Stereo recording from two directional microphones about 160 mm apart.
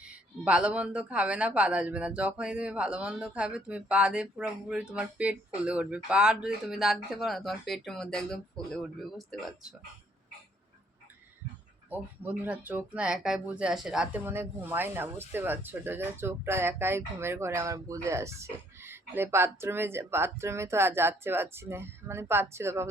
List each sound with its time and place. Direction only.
0.0 s speech: 5° right (ahead or behind)
11.9 s speech: 10° right (ahead or behind)